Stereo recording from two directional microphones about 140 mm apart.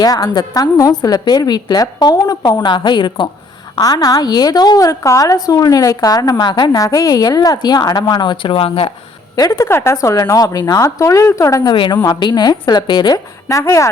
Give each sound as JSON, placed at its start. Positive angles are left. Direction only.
{"t": 0.0, "sound": "a woman's voice", "side_deg": 30}
{"t": 9.3, "sound": "a woman's voice", "side_deg": 25}